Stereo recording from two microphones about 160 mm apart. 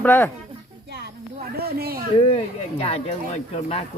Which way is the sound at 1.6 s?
75° right (ahead or behind).